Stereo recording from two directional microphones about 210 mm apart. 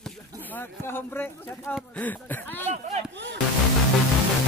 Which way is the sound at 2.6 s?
35° right (ahead or behind).